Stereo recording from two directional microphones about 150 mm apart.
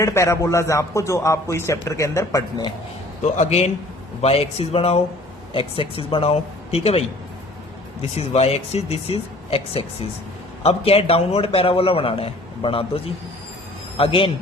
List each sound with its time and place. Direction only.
0.0 s a man's voice: 20° left (ahead or behind)
3.2 s a man's voice: 50° left (ahead or behind)
8.1 s a man's voice: 45° left (ahead or behind)